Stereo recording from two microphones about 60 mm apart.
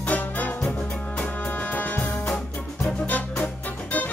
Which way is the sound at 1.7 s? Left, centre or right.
Left.